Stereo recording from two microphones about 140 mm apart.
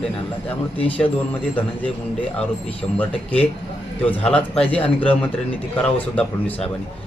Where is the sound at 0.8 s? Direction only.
10° left (ahead or behind).